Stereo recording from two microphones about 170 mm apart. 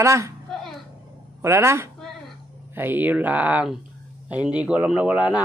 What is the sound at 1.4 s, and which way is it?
A man's voice, 15° right (ahead or behind).